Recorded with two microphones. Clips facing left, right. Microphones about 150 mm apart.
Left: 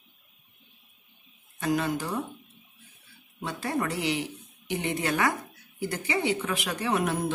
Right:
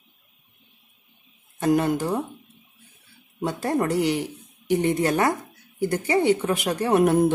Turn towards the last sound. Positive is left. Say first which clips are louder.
# right 8 dB
turn(degrees=-50)  # may be behind; listen again after turning